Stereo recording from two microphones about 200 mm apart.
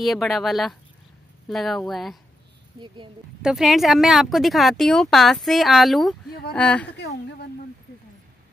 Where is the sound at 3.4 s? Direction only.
Centre (ahead or behind).